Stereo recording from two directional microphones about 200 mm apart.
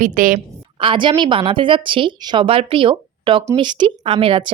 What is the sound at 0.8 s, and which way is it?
A woman's voice, 25° right (ahead or behind).